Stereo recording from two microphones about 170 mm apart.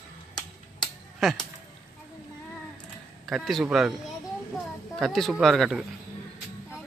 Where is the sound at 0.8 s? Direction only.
Centre (ahead or behind).